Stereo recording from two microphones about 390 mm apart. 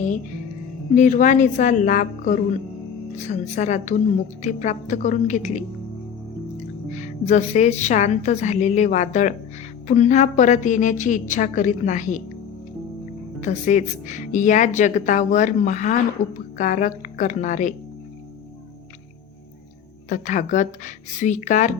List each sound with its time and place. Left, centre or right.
0.9 s a woman's voice: centre
6.9 s a woman's voice: centre
13.4 s a woman's voice: centre
20.1 s a woman's voice: centre